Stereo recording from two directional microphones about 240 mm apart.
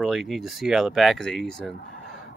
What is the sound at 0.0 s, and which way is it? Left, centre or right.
Speech, centre.